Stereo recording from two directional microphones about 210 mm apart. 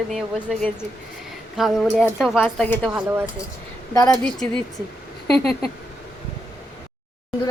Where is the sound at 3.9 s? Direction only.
15° left (ahead or behind).